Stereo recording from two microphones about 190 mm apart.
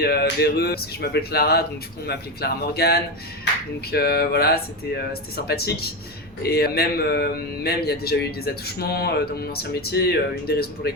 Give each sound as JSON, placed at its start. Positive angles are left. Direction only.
{"t": 0.0, "sound": "a man's voice", "side_deg": 55}